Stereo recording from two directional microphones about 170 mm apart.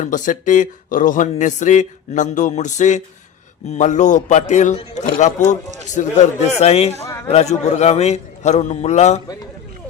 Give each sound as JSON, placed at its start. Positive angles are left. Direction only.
{"t": 0.0, "sound": "a man's voice", "side_deg": 50}
{"t": 7.0, "sound": "a sound", "side_deg": 15}
{"t": 7.3, "sound": "a man's voice", "side_deg": 40}